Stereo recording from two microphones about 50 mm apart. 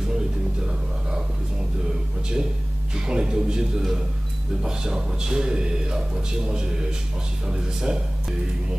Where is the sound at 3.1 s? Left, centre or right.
Centre.